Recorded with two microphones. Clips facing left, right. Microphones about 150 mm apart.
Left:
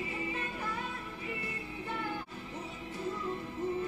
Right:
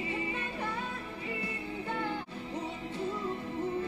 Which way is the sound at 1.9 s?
25° right (ahead or behind).